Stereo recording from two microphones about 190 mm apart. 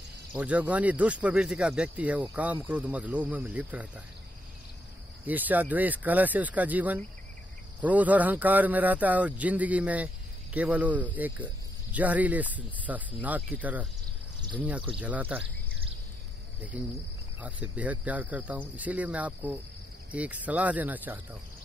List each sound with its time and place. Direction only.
0.3 s speech: 5° right (ahead or behind)
5.2 s speech: 10° right (ahead or behind)
15.0 s speech: 5° right (ahead or behind)
16.7 s speech: 5° right (ahead or behind)